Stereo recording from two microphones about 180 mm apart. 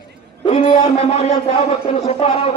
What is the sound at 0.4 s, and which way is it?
A man's voice, 30° left (ahead or behind).